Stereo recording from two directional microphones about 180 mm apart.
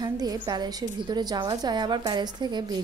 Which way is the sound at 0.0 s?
20° right (ahead or behind).